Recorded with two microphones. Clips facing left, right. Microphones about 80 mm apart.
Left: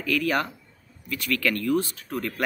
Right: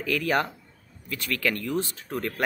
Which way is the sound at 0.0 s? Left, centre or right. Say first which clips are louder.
Even; right.